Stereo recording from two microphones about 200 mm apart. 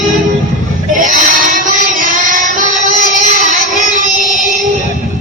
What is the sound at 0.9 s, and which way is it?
Child singing, 40° right (ahead or behind).